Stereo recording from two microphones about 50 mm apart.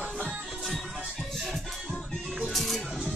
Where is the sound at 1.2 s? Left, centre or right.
Centre.